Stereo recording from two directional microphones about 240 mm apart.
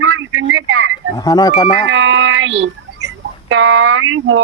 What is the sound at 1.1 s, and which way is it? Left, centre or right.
Speech, centre.